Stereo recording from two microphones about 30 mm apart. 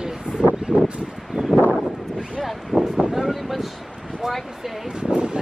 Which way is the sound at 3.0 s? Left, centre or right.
Centre.